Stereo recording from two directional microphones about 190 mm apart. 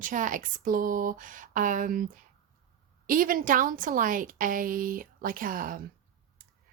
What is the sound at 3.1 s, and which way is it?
A woman's voice, 45° right (ahead or behind).